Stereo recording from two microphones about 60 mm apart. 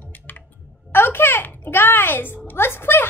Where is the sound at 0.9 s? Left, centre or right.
Left.